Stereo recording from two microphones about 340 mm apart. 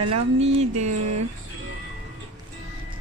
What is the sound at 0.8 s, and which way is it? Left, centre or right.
Speech, right.